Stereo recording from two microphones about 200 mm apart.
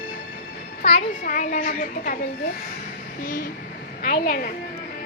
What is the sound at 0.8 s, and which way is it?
A child's voice, 35° left (ahead or behind).